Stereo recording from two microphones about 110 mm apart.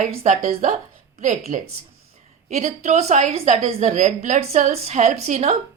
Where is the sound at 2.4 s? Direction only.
90° right.